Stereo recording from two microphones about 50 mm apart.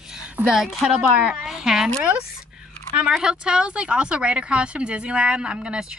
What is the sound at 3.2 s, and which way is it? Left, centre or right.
Speech, centre.